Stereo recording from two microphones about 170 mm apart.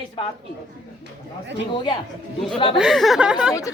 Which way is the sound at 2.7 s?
Centre (ahead or behind).